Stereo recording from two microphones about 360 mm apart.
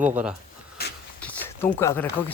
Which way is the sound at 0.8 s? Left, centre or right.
Left.